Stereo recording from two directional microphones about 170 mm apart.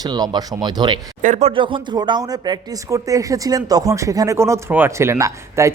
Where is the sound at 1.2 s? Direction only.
45° right (ahead or behind).